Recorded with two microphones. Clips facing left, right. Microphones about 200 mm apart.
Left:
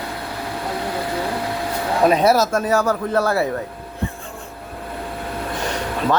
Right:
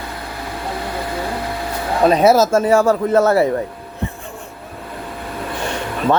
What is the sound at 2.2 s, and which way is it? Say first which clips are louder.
Speech: right 4 dB; 25° right (ahead or behind).